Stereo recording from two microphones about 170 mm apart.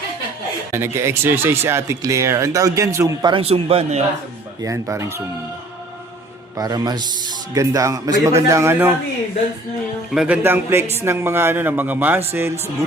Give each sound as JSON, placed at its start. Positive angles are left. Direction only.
{"t": 0.7, "sound": "speech", "side_deg": -15}
{"t": 3.4, "sound": "a man's voice", "side_deg": -35}
{"t": 4.6, "sound": "speech", "side_deg": -15}
{"t": 6.6, "sound": "speech", "side_deg": -25}
{"t": 10.1, "sound": "speech", "side_deg": -5}